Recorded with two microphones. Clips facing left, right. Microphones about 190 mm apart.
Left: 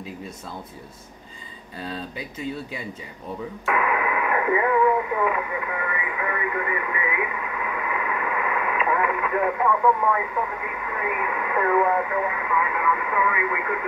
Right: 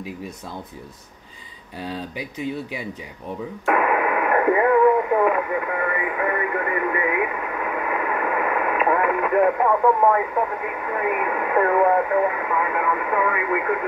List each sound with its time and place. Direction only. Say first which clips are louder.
1.8 s speech: right 3 dB; 15° right (ahead or behind)
3.6 s speech: right 4 dB; 50° right (ahead or behind)